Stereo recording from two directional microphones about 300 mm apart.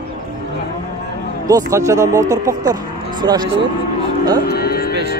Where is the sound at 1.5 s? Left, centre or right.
Centre.